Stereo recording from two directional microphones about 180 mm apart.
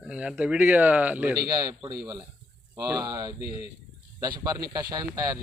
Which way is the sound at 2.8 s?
20° right (ahead or behind).